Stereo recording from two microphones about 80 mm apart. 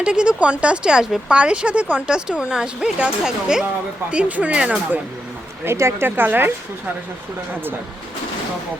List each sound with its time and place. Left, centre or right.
0.0 s speech: centre
5.6 s a woman's voice: right